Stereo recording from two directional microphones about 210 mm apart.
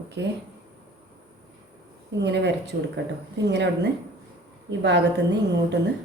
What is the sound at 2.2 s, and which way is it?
A woman's voice, 55° right (ahead or behind).